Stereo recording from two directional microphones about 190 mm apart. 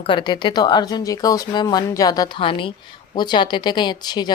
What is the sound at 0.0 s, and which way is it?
Speech, 25° left (ahead or behind).